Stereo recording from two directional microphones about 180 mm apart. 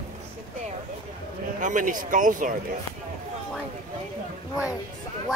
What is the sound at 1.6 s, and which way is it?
Speech, 45° right (ahead or behind).